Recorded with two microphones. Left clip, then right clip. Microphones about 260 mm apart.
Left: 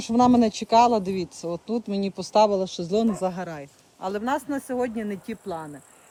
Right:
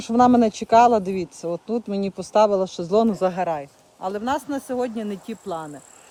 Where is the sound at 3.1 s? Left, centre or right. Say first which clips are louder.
Right 6 dB; right.